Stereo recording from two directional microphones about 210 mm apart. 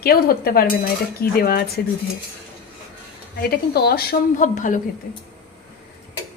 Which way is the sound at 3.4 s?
50° left (ahead or behind).